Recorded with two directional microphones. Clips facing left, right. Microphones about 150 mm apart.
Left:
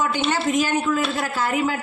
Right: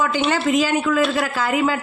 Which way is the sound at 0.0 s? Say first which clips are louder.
Right 2 dB; 90° right.